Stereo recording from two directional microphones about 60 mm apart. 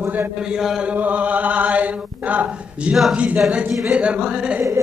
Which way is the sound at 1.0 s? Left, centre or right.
Right.